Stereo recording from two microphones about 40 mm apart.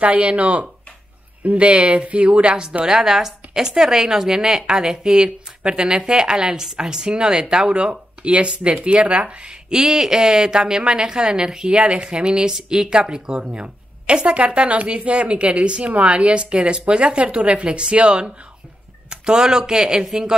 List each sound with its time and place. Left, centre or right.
0.0 s speech: right
1.7 s speech: right